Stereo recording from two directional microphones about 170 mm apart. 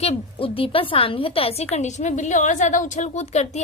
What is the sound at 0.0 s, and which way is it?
A woman's voice, 35° left (ahead or behind).